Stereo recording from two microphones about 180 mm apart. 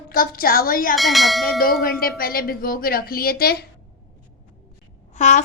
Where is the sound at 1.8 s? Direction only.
55° left (ahead or behind).